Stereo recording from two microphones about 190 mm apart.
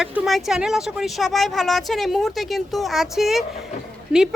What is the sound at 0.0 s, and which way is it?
A man's voice, centre (ahead or behind).